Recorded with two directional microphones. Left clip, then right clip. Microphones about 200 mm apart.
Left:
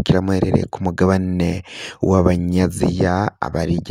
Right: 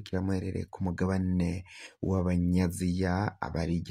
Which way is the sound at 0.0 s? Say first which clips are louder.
Left 16 dB; 50° left (ahead or behind).